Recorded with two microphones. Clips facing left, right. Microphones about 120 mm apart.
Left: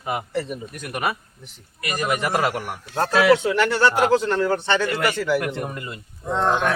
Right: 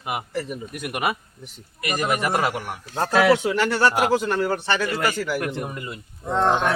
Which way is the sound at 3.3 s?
25° right (ahead or behind).